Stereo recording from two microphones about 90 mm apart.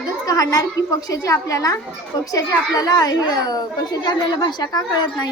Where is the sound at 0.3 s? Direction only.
40° left (ahead or behind).